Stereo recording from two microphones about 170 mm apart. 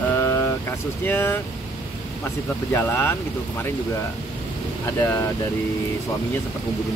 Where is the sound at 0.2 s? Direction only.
15° left (ahead or behind).